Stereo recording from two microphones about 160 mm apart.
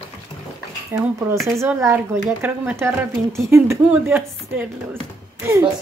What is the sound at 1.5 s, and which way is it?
Speech, 15° right (ahead or behind).